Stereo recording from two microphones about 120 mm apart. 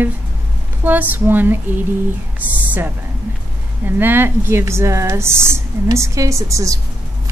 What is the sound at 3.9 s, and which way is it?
Speech, 15° right (ahead or behind).